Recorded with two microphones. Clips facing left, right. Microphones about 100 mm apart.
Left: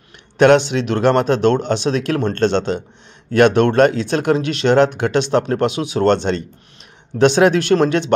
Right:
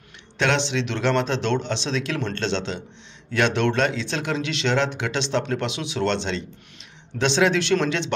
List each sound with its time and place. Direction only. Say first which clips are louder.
0.4 s speech: left 11 dB; 50° left (ahead or behind)